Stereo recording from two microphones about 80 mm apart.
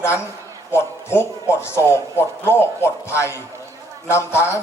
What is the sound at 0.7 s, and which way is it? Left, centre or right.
A man's voice, left.